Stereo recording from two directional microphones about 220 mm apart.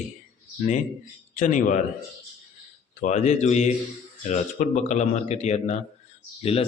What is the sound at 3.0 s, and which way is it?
Speech, 30° left (ahead or behind).